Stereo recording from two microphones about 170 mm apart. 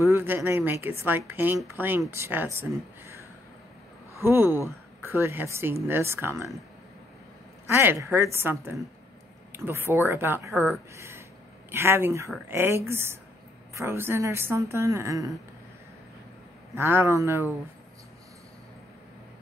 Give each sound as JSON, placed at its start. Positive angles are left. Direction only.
{"t": 0.0, "sound": "speech", "side_deg": -15}
{"t": 4.2, "sound": "speech", "side_deg": -15}
{"t": 7.7, "sound": "speech", "side_deg": -15}
{"t": 16.7, "sound": "speech", "side_deg": -15}